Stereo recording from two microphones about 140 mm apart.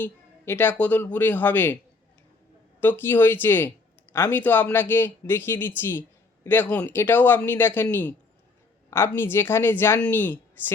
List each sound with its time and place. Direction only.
0.0 s speech: 15° left (ahead or behind)
2.8 s speech: 15° left (ahead or behind)